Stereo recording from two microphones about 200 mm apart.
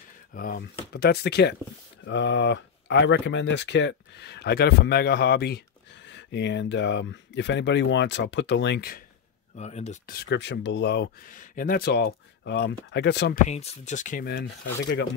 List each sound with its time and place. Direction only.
0.3 s speech: 45° left (ahead or behind)
9.6 s speech: 35° left (ahead or behind)
10.0 s speech: 55° left (ahead or behind)
11.3 s speech: 45° left (ahead or behind); by 13.4 s 60° left (ahead or behind)
13.5 s speech: 35° left (ahead or behind)